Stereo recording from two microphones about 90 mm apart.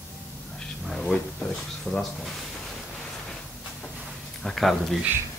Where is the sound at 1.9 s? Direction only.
Centre (ahead or behind).